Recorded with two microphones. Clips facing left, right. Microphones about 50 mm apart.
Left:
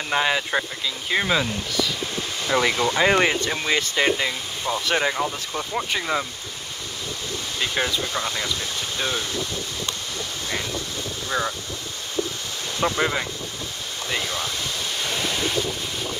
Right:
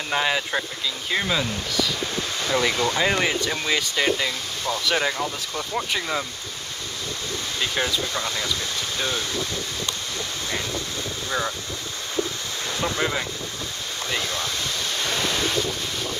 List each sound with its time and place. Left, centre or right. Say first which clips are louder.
0.1 s speech: left 2 dB; centre
7.6 s speech: left 1 dB; centre
12.8 s speech: left 4 dB; centre
14.1 s speech: left 1 dB; left
15.0 s waves: right 1 dB; centre